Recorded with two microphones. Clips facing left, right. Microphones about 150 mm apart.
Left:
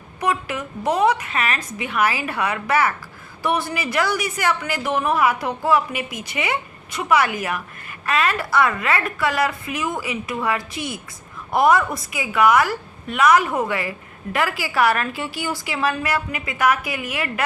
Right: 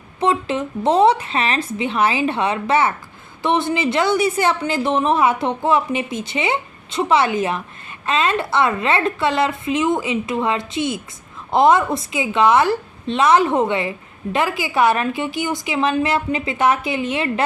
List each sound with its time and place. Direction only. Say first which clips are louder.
0.2 s a woman's voice: right 5 dB; 25° right (ahead or behind)